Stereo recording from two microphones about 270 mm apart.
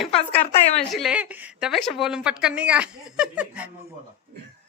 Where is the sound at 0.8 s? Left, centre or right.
Centre.